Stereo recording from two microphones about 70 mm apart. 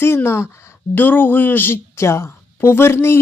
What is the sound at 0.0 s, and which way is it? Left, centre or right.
A woman's voice, left.